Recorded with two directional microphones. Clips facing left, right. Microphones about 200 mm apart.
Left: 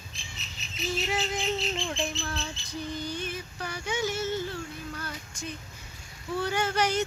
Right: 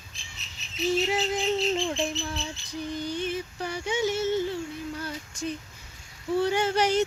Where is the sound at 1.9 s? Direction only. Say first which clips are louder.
Right 3 dB; 15° right (ahead or behind).